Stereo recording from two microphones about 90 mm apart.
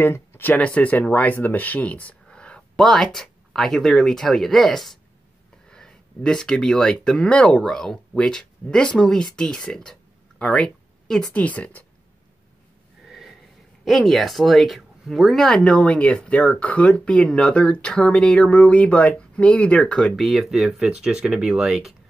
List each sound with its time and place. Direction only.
0.0 s speech: 25° left (ahead or behind)
13.0 s snort: 5° right (ahead or behind)
13.8 s speech: centre (ahead or behind)
20.2 s speech: centre (ahead or behind)